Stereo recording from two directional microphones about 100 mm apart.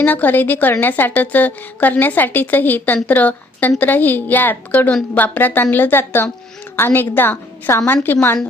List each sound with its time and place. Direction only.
0.0 s a woman's voice: 15° left (ahead or behind)